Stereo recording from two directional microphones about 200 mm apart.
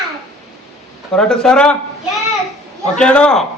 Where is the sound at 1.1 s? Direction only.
5° left (ahead or behind).